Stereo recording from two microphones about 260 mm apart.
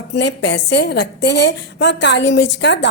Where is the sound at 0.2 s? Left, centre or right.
Left.